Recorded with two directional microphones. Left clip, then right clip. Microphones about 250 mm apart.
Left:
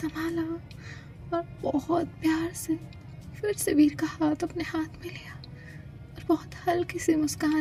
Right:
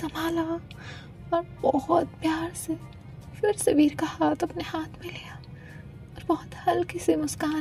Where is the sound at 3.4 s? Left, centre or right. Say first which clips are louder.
Right 2 dB; right.